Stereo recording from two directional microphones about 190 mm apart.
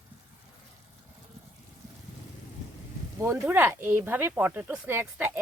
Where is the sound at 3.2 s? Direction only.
10° right (ahead or behind).